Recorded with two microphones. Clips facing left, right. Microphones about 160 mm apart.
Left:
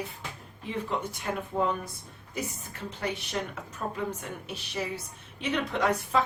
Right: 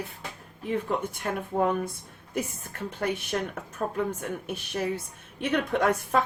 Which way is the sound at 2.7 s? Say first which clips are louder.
Right 4 dB; 55° right (ahead or behind).